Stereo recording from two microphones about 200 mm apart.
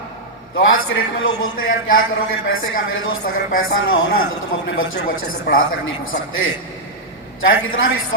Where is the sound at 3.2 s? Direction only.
45° left (ahead or behind).